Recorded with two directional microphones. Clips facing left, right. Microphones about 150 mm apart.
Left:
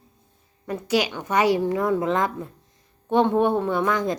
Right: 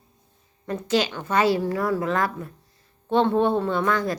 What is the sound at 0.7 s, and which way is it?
A woman's voice, 10° left (ahead or behind).